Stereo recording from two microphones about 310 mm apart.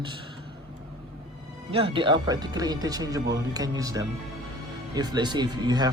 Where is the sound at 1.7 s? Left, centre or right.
Centre.